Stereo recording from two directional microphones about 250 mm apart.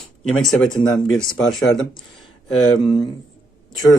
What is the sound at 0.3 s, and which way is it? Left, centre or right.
Speech, centre.